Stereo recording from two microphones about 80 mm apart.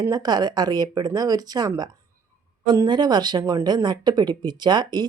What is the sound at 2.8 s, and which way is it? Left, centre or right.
Speech, right.